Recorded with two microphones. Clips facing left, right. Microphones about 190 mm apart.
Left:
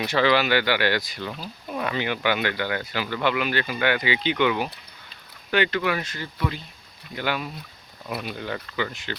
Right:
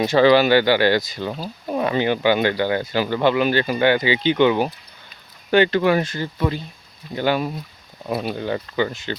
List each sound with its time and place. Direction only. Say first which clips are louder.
0.2 s speech: right 7 dB; 35° right (ahead or behind)